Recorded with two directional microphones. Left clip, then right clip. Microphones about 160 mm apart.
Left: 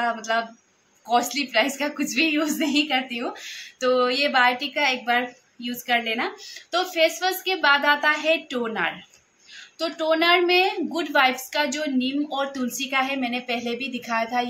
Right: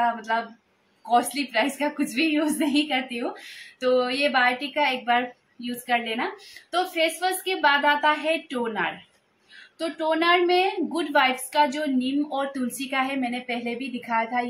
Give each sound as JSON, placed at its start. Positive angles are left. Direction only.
{"t": 0.0, "sound": "a woman's voice", "side_deg": 5}